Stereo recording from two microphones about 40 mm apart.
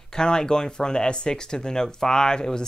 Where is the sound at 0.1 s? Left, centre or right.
Centre.